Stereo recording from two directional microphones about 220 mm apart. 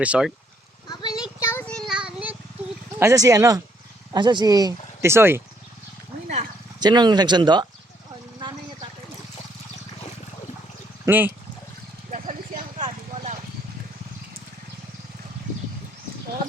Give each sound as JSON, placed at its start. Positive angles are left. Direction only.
{"t": 0.0, "sound": "speech", "side_deg": -5}
{"t": 1.2, "sound": "a sound", "side_deg": 10}
{"t": 3.0, "sound": "speech", "side_deg": -15}
{"t": 6.7, "sound": "speech", "side_deg": -20}
{"t": 11.0, "sound": "speech", "side_deg": -10}
{"t": 12.1, "sound": "vehicle", "side_deg": -35}